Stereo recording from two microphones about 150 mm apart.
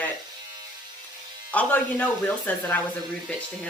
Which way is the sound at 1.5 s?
10° left (ahead or behind).